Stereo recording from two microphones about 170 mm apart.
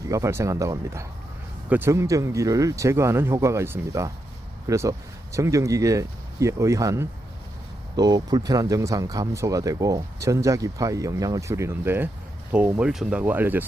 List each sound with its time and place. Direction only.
0.1 s speech: 15° right (ahead or behind)